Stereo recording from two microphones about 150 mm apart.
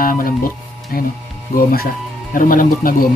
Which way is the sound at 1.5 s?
80° left.